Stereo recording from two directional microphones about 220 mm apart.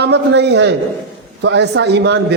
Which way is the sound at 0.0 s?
50° right (ahead or behind).